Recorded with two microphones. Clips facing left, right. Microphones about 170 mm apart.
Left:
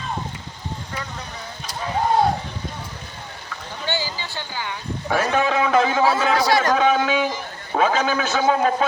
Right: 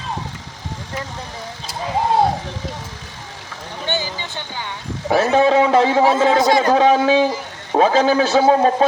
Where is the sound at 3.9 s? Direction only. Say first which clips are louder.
Right 2 dB; 20° right (ahead or behind).